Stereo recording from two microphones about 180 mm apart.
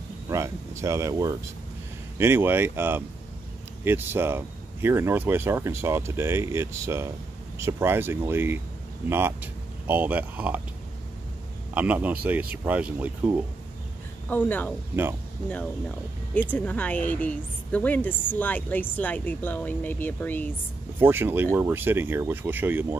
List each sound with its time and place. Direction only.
0.3 s speech: 15° right (ahead or behind)
11.7 s speech: 10° right (ahead or behind)
14.3 s a woman's voice: 10° left (ahead or behind)
16.3 s a woman's voice: 10° left (ahead or behind)
21.0 s speech: 10° right (ahead or behind)